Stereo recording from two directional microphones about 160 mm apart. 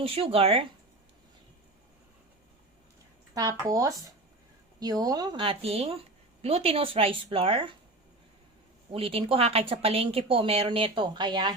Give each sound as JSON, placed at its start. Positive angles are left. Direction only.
{"t": 0.0, "sound": "speech", "side_deg": -35}
{"t": 3.6, "sound": "speech", "side_deg": -20}
{"t": 8.9, "sound": "speech", "side_deg": -35}